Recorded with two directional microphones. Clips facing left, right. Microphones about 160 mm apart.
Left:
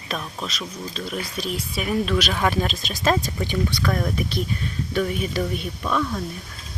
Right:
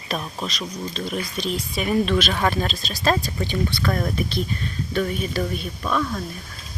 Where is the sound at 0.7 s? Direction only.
5° left (ahead or behind).